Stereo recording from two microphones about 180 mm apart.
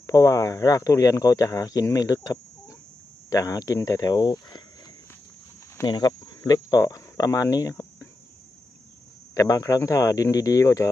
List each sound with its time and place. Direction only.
0.0 s speech: 20° left (ahead or behind)
5.8 s speech: 20° left (ahead or behind)
9.3 s speech: 20° left (ahead or behind)